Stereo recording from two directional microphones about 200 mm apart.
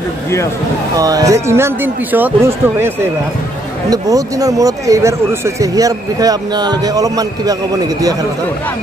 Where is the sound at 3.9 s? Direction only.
15° right (ahead or behind).